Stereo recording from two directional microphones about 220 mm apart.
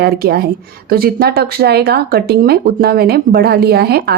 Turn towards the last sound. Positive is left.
turn(degrees=-45)  # may be behind; listen again after turning